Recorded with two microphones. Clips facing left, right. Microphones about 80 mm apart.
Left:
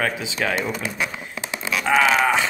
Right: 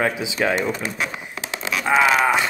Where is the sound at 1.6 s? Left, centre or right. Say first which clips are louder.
Right 1 dB; centre.